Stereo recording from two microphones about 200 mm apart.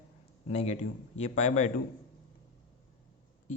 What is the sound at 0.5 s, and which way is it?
Speech, 35° left (ahead or behind).